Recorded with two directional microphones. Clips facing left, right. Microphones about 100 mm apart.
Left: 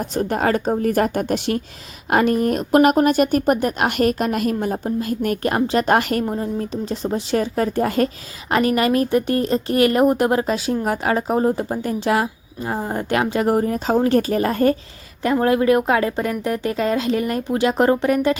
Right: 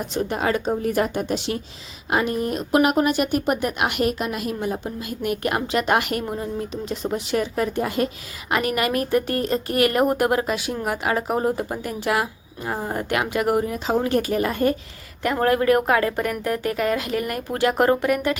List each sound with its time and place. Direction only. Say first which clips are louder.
0.2 s a woman's voice: left 3 dB; 45° left (ahead or behind)
15.2 s a woman's voice: left 3 dB; 25° left (ahead or behind)